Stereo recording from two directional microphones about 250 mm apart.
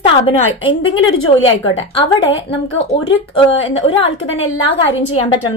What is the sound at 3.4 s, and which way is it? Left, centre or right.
Speech, left.